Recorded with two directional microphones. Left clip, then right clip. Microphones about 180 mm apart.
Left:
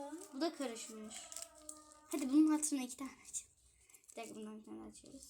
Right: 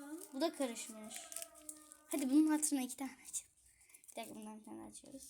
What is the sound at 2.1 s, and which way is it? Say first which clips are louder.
A child's voice: even; 50° right (ahead or behind).